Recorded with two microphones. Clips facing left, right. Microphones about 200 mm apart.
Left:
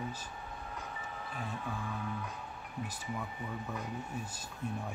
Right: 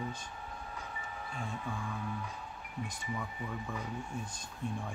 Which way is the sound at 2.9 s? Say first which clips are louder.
Right 1 dB; 5° left (ahead or behind).